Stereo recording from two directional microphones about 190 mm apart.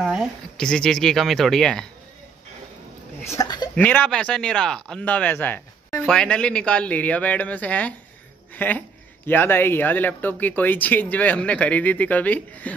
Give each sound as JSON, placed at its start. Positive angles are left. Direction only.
{"t": 0.0, "sound": "speech", "side_deg": -5}
{"t": 3.3, "sound": "speech", "side_deg": 20}
{"t": 3.7, "sound": "speech", "side_deg": 10}